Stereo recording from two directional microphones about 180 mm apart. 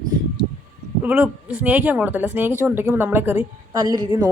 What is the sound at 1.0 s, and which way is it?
Speech, 10° right (ahead or behind).